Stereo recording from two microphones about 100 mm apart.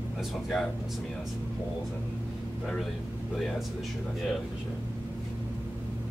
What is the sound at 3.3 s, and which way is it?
Speech, centre (ahead or behind).